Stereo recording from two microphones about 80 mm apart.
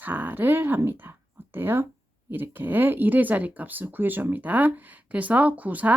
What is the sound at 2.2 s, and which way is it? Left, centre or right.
Speech, right.